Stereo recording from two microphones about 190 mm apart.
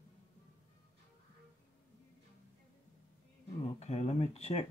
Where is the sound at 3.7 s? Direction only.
35° left (ahead or behind).